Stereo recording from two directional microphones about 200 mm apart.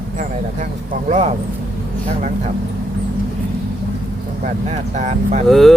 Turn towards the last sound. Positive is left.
turn(degrees=0)  # may be behind; listen again after turning